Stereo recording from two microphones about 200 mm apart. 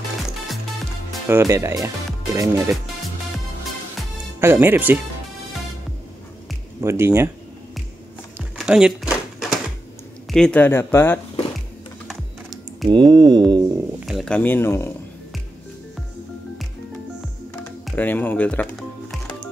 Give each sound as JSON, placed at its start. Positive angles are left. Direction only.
{"t": 1.3, "sound": "speech", "side_deg": -15}
{"t": 4.4, "sound": "speech", "side_deg": -10}
{"t": 6.8, "sound": "speech", "side_deg": -15}
{"t": 8.5, "sound": "crumpling", "side_deg": -5}
{"t": 10.3, "sound": "speech", "side_deg": 5}
{"t": 12.8, "sound": "a sound", "side_deg": -20}
{"t": 13.9, "sound": "speech", "side_deg": 0}
{"t": 17.6, "sound": "music", "side_deg": 5}